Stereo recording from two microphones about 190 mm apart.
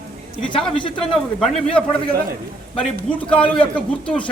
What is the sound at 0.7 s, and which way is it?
Speech, 25° left (ahead or behind).